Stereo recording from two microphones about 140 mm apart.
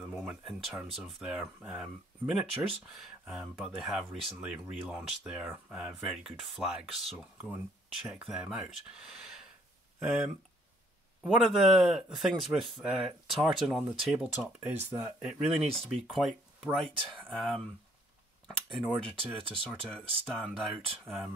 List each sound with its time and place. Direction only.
0.0 s speech: centre (ahead or behind)
9.9 s speech: 5° right (ahead or behind)
18.7 s speech: 5° left (ahead or behind)